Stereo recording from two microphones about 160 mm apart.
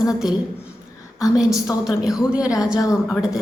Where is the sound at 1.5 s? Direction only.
20° left (ahead or behind).